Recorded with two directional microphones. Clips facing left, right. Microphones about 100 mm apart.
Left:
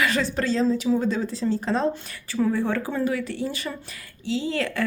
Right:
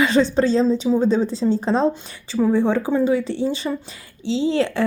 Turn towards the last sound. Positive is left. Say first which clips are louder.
# right 6 dB
turn(degrees=-30)  # may be behind; listen again after turning